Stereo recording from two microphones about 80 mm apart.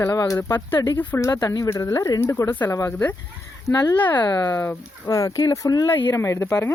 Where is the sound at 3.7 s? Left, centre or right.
Left.